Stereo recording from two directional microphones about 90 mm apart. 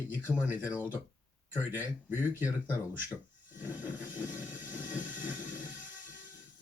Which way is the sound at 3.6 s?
20° right (ahead or behind).